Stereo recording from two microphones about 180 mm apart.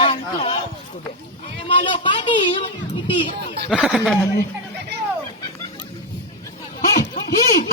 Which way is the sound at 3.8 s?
Centre (ahead or behind).